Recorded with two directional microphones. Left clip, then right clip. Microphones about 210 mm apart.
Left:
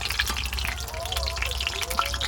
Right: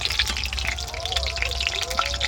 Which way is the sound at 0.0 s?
5° right (ahead or behind).